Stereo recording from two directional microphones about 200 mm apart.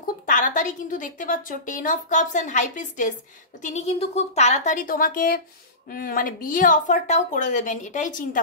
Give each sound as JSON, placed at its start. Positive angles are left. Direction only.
{"t": 0.0, "sound": "a woman's voice", "side_deg": 40}